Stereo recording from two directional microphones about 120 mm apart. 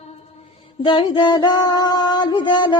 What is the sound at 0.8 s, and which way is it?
Music, 40° left (ahead or behind).